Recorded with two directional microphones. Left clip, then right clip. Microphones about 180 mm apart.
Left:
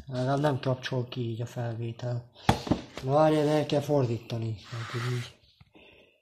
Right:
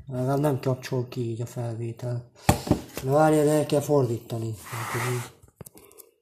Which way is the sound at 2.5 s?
60° right (ahead or behind).